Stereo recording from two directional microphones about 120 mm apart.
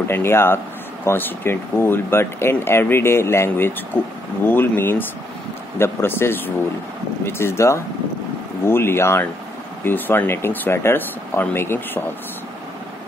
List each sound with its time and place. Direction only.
0.1 s speech: 20° left (ahead or behind)